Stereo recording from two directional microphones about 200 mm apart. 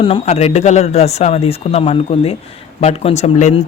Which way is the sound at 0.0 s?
30° left (ahead or behind).